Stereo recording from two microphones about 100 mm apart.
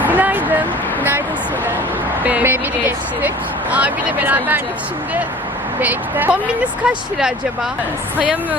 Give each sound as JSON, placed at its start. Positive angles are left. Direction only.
{"t": 0.0, "sound": "a sound", "side_deg": -15}
{"t": 2.2, "sound": "speech", "side_deg": -15}
{"t": 5.8, "sound": "speech", "side_deg": -15}
{"t": 6.8, "sound": "speech", "side_deg": -5}